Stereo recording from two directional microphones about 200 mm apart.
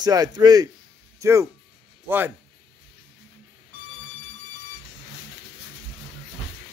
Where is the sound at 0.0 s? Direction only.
20° right (ahead or behind).